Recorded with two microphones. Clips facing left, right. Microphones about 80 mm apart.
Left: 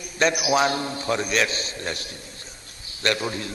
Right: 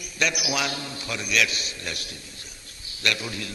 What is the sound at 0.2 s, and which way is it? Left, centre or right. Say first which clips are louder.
A man's voice: left 6 dB; left.